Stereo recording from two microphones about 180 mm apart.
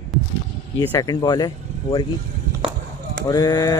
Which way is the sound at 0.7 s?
20° left (ahead or behind).